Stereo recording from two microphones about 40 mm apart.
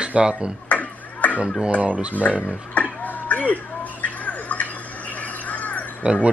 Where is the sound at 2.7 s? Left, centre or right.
Left.